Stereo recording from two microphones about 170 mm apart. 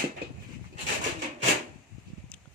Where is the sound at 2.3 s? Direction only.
10° left (ahead or behind).